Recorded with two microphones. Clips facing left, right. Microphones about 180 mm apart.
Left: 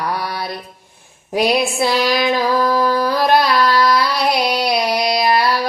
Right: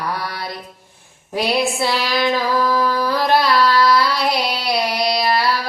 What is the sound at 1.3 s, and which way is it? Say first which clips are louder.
Female singing: left 3 dB; 15° left (ahead or behind).